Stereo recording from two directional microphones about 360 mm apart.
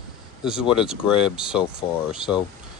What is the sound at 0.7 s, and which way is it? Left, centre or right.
Speech, centre.